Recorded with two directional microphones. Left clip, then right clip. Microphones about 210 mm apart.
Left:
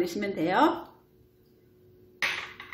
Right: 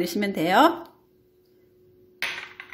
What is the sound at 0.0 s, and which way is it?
Speech, 50° right (ahead or behind).